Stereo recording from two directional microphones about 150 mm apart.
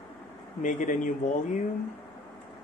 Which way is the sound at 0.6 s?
60° left (ahead or behind).